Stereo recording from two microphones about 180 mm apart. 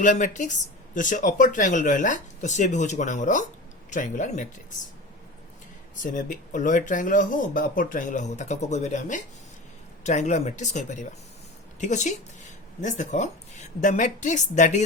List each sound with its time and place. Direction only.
0.0 s speech: 45° left (ahead or behind)
6.0 s speech: 45° left (ahead or behind)